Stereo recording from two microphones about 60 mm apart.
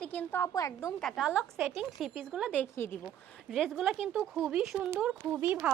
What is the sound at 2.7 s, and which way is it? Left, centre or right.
Speech, left.